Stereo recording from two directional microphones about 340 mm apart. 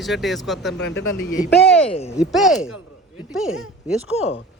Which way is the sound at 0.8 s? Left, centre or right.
Left.